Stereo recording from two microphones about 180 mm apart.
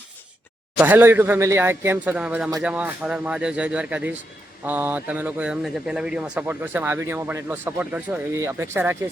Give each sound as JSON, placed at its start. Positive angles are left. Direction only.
{"t": 0.8, "sound": "speech", "side_deg": -10}